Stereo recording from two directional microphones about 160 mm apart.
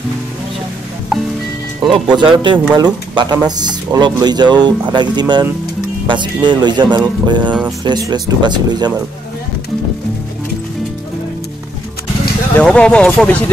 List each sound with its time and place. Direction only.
1.8 s speech: 30° right (ahead or behind)
12.5 s speech: 5° left (ahead or behind)